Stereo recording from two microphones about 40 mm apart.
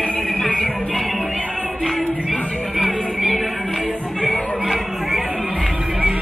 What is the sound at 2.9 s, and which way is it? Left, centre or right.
Music, right.